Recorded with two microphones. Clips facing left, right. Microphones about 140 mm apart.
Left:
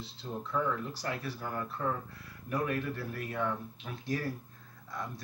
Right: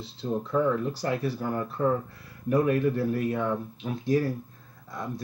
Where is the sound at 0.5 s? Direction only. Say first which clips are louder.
Right 7 dB; 35° right (ahead or behind); by 4.2 s 20° right (ahead or behind).